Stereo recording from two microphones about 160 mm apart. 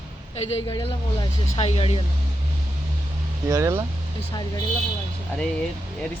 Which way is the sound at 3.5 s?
20° right (ahead or behind).